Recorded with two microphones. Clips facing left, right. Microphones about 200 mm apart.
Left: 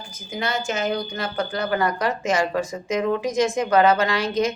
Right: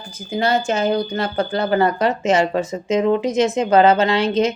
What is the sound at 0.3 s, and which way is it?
Speech, 30° right (ahead or behind).